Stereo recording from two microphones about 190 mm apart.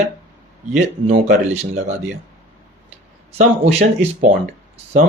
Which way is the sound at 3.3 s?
35° right (ahead or behind).